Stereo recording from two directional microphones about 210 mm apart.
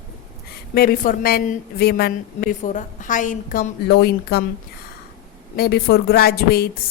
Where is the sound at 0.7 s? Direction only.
45° left (ahead or behind).